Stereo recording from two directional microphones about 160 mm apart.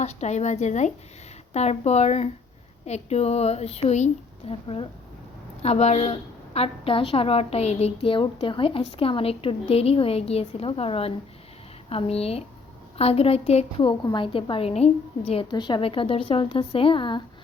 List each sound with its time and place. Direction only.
0.0 s a woman's voice: 45° left (ahead or behind)